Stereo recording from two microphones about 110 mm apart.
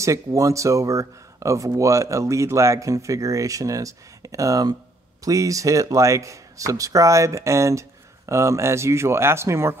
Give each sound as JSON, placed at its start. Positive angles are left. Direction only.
{"t": 0.0, "sound": "speech", "side_deg": -30}